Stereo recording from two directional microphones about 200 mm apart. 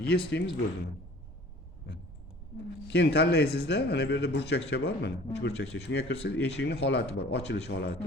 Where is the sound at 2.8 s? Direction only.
60° left (ahead or behind).